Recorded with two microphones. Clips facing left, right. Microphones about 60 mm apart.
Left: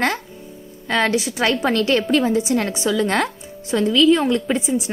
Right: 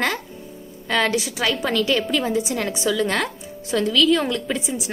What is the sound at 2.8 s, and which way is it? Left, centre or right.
A woman's voice, left.